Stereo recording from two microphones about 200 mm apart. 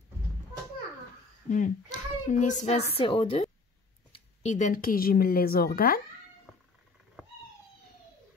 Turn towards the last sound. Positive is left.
turn(degrees=0)  # may be behind; listen again after turning